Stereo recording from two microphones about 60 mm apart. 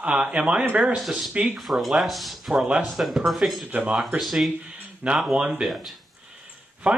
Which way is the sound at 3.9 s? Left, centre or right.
Centre.